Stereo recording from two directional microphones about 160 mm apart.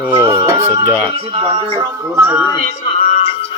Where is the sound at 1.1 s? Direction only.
35° right (ahead or behind); by 2.4 s 15° right (ahead or behind).